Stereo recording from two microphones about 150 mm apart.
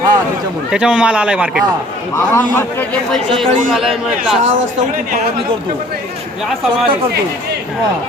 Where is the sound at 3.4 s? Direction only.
Centre (ahead or behind).